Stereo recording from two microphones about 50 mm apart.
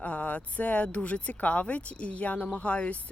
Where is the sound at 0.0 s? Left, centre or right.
Left.